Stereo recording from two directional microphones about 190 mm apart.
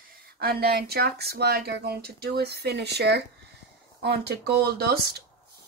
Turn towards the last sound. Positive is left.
turn(degrees=-55)  # may be behind; listen again after turning